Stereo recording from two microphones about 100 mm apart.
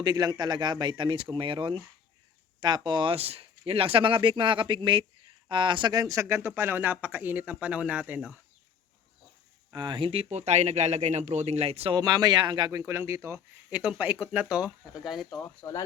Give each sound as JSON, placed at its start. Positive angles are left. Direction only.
{"t": 0.0, "sound": "speech", "side_deg": -40}
{"t": 5.9, "sound": "speech", "side_deg": -35}
{"t": 9.7, "sound": "speech", "side_deg": -50}
{"t": 10.1, "sound": "speech", "side_deg": -85}
{"t": 11.9, "sound": "speech", "side_deg": -40}
{"t": 12.8, "sound": "speech", "side_deg": -25}
{"t": 13.7, "sound": "speech", "side_deg": -10}